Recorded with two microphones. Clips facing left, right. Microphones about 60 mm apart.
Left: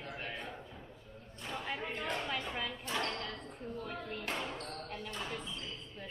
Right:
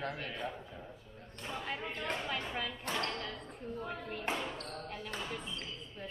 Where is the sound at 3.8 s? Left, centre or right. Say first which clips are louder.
Right 1 dB; right.